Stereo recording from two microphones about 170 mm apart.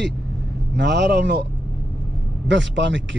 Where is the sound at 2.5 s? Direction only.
90° right.